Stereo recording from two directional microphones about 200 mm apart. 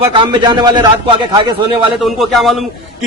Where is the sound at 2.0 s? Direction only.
Centre (ahead or behind).